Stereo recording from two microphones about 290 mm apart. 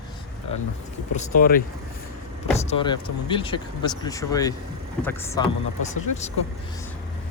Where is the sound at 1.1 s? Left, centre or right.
Left.